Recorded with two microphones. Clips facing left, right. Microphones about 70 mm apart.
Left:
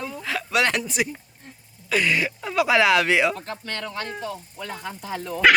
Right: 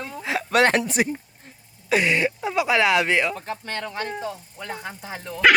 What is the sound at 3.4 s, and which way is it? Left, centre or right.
Speech, right.